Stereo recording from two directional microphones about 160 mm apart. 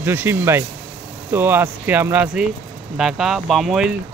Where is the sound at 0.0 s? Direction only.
15° right (ahead or behind).